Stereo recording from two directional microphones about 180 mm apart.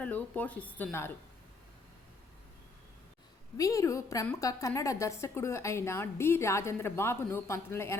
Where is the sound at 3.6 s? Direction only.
20° left (ahead or behind).